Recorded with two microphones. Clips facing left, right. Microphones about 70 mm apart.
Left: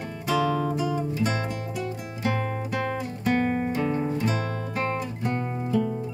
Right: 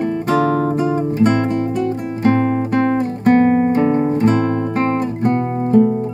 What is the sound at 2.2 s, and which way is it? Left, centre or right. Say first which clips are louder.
Guitar: right 12 dB; right.